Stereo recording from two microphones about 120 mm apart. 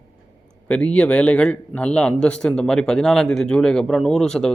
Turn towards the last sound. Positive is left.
turn(degrees=5)  # may be behind; listen again after turning